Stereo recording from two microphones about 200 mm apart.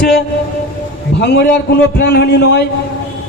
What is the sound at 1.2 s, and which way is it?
A man's voice, 55° left (ahead or behind).